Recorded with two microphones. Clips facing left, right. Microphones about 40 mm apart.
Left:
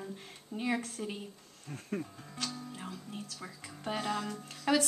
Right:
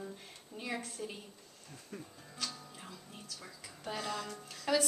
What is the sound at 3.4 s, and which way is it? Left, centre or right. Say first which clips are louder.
Speech: left 4 dB; left.